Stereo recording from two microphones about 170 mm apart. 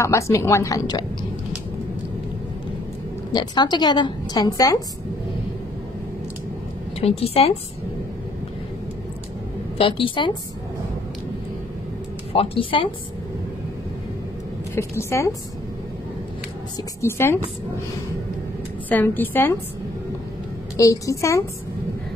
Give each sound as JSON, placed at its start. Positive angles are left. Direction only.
{"t": 0.0, "sound": "a woman's voice", "side_deg": 15}
{"t": 3.3, "sound": "a woman's voice", "side_deg": 25}
{"t": 7.0, "sound": "speech", "side_deg": 35}
{"t": 9.8, "sound": "speech", "side_deg": 30}
{"t": 12.3, "sound": "speech", "side_deg": 35}
{"t": 14.8, "sound": "a woman's voice", "side_deg": 15}
{"t": 17.0, "sound": "a woman's voice", "side_deg": 15}
{"t": 18.9, "sound": "a woman's voice", "side_deg": 10}
{"t": 20.7, "sound": "a woman's voice", "side_deg": 20}